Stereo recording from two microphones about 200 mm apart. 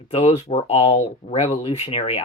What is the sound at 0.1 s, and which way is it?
Speech, 30° left (ahead or behind).